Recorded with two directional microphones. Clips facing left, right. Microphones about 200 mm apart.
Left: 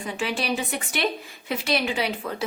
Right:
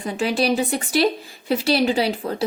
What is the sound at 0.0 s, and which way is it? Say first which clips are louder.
Speech: right 7 dB; 40° right (ahead or behind).